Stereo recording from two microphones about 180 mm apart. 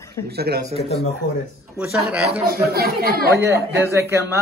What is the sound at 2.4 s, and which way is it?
Speech, 60° right (ahead or behind).